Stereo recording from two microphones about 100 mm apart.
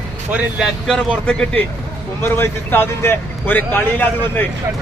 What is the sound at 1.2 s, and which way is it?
Speech, 10° left (ahead or behind).